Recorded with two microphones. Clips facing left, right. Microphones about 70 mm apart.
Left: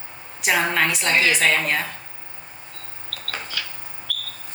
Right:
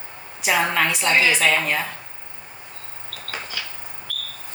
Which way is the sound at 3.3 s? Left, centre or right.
Left.